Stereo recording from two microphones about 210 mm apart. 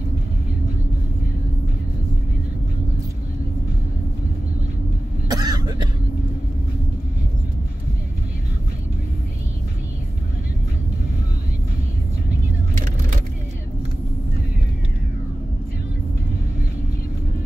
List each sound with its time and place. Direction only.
5.3 s cough: 20° right (ahead or behind)